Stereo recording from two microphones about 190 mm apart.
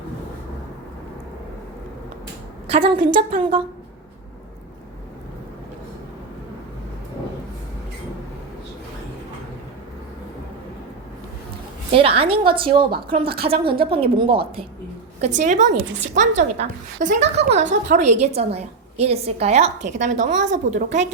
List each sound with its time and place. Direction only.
2.6 s a woman's voice: 30° right (ahead or behind)
11.9 s a woman's voice: 30° right (ahead or behind)
15.2 s a woman's voice: 40° right (ahead or behind)